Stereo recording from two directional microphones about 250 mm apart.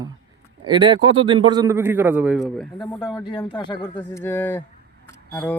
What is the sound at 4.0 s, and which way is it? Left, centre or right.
Speech, centre.